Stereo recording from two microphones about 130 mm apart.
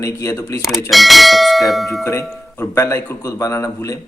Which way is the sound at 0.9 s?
Centre (ahead or behind).